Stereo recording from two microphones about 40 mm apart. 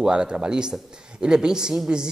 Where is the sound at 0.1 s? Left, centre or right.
Right.